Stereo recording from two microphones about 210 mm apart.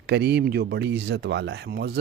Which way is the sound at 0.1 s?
50° right (ahead or behind).